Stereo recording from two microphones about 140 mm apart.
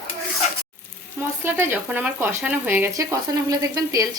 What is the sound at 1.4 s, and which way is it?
Speech, 15° right (ahead or behind).